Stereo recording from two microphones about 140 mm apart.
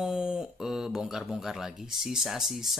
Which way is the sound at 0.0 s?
5° right (ahead or behind).